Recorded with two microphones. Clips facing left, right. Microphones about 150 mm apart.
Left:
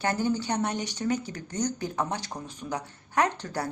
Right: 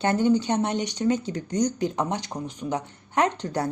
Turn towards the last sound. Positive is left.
turn(degrees=-20)  # may be behind; listen again after turning